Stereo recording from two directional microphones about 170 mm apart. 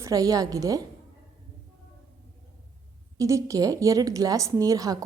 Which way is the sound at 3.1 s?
20° right (ahead or behind).